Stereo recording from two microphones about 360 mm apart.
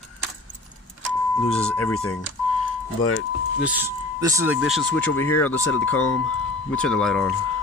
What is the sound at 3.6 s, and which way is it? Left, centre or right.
Speech, centre.